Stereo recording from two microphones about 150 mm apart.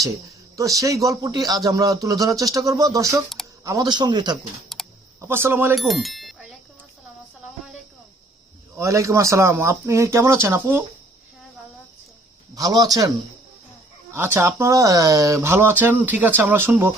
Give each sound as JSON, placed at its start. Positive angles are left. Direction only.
{"t": 0.5, "sound": "speech", "side_deg": -20}
{"t": 4.7, "sound": "computer keyboard", "side_deg": 0}
{"t": 5.2, "sound": "speech", "side_deg": -15}
{"t": 5.7, "sound": "speech", "side_deg": 0}
{"t": 8.8, "sound": "speech", "side_deg": -20}
{"t": 12.5, "sound": "speech", "side_deg": -25}
{"t": 14.1, "sound": "speech", "side_deg": -15}